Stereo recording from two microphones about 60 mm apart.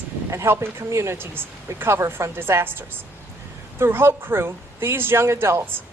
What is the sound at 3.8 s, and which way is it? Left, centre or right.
Speech, right.